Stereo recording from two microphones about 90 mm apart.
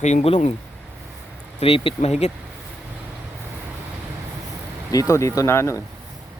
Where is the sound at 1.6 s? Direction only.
90° left.